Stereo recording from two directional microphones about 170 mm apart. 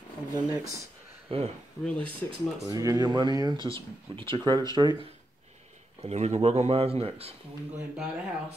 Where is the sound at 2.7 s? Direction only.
20° right (ahead or behind).